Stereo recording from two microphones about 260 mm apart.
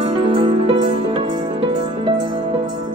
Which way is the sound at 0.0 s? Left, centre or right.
Centre.